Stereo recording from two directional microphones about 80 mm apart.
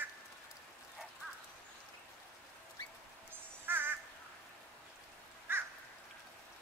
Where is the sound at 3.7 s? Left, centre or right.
Right.